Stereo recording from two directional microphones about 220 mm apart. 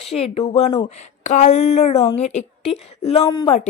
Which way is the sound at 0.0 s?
25° left (ahead or behind).